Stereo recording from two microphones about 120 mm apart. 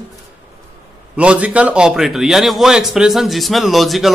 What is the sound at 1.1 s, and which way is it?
A man's voice, 10° right (ahead or behind).